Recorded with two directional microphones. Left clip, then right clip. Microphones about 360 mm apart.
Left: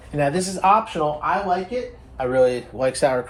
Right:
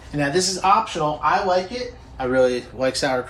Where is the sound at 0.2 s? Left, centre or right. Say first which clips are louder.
Even; centre.